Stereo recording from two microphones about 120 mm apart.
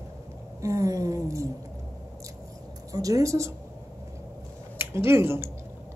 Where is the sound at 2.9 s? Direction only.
30° right (ahead or behind).